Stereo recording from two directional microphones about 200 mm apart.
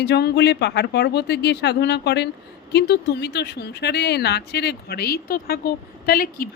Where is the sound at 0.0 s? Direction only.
55° left (ahead or behind).